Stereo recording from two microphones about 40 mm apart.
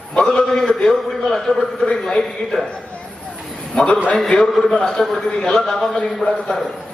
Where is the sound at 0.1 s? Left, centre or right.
Centre.